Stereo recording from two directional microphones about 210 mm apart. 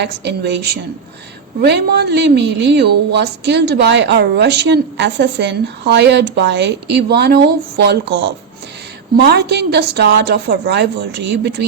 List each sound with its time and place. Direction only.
0.0 s a woman's voice: 55° right (ahead or behind)